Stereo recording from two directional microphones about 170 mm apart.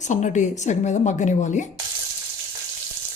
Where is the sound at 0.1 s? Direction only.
45° left (ahead or behind).